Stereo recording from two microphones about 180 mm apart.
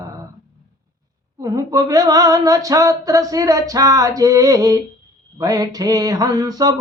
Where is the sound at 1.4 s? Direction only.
20° right (ahead or behind).